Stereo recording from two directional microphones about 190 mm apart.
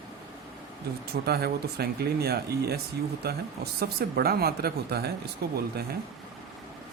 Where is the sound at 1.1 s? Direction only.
55° right (ahead or behind).